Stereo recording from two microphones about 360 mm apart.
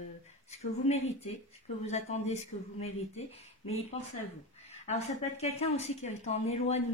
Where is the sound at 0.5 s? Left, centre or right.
Centre.